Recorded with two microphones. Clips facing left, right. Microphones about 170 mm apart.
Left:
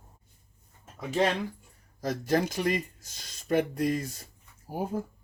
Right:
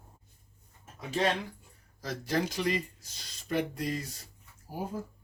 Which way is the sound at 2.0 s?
45° left (ahead or behind).